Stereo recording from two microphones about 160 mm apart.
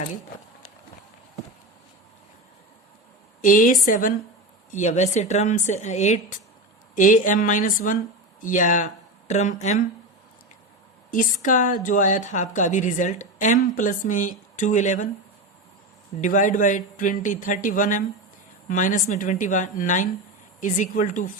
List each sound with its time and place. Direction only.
3.4 s a woman's voice: 55° left (ahead or behind)
11.1 s a woman's voice: 55° left (ahead or behind)
16.2 s a woman's voice: 55° left (ahead or behind)